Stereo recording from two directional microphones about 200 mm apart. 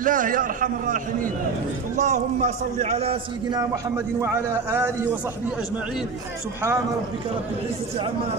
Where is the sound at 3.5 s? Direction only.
15° right (ahead or behind).